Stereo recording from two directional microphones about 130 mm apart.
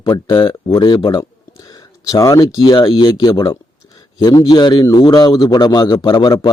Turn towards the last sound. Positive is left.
turn(degrees=30)  # may be behind; listen again after turning